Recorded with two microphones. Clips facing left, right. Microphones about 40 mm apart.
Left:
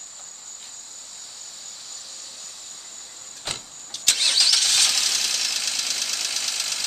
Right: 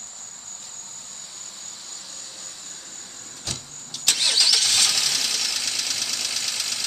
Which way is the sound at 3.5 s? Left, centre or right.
Left.